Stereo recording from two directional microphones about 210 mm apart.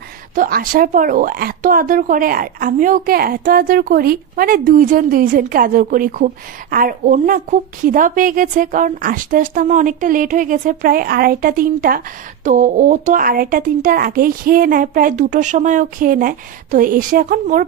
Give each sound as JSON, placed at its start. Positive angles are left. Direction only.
{"t": 0.3, "sound": "speech", "side_deg": -40}